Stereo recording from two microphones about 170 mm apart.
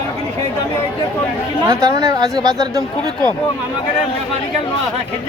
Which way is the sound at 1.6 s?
20° right (ahead or behind).